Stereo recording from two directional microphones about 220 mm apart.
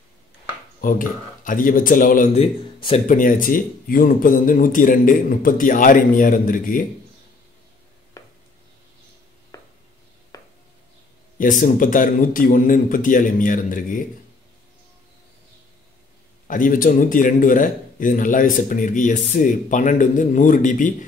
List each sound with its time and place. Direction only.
0.7 s speech: 40° left (ahead or behind)
9.5 s a sound: 15° left (ahead or behind)
11.3 s speech: 35° left (ahead or behind)
16.4 s speech: 40° left (ahead or behind)